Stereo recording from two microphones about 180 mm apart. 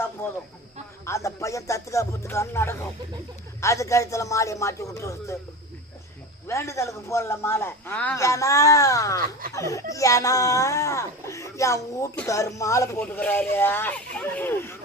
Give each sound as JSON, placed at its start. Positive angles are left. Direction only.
{"t": 0.2, "sound": "a sound", "side_deg": 15}
{"t": 1.0, "sound": "music", "side_deg": 15}
{"t": 3.6, "sound": "a man's voice", "side_deg": 15}
{"t": 6.5, "sound": "a man's voice", "side_deg": 15}
{"t": 12.4, "sound": "a man's voice", "side_deg": 15}